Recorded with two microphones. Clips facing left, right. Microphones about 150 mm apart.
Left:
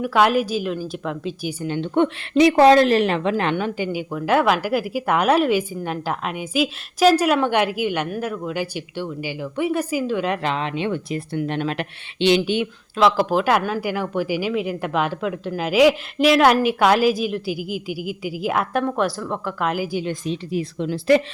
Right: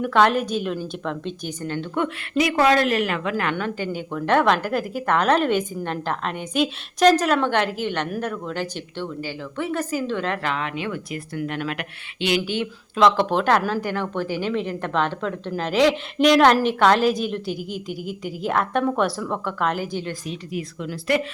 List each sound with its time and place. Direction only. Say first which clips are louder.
0.0 s a woman's voice: left 1 dB; 5° left (ahead or behind)
1.6 s speech: left 5 dB; 20° left (ahead or behind)
3.5 s speech: left 3 dB; 15° left (ahead or behind)
13.0 s a woman's voice: even; 5° left (ahead or behind)
20.2 s speech: left 5 dB; 30° left (ahead or behind)